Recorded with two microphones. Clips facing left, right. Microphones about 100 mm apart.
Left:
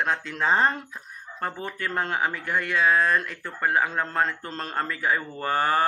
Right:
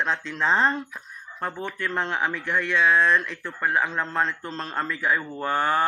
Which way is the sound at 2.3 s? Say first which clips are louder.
Right 1 dB; 40° left (ahead or behind).